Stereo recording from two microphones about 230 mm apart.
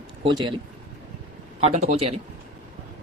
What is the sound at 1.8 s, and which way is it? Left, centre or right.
Speech, right.